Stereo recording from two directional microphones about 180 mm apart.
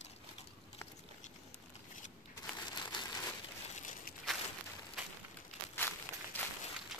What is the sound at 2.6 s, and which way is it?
Crumpling, 25° left (ahead or behind).